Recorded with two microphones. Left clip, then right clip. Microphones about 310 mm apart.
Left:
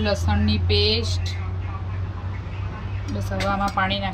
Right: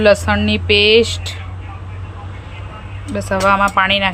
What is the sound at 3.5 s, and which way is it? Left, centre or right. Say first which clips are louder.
Speech: right 10 dB; right.